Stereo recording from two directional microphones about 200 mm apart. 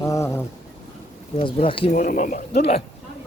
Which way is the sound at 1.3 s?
25° left (ahead or behind).